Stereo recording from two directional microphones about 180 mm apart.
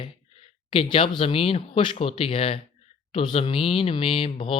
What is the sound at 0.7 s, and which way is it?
Speech, 30° left (ahead or behind).